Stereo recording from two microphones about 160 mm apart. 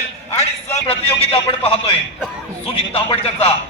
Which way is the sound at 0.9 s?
35° left (ahead or behind).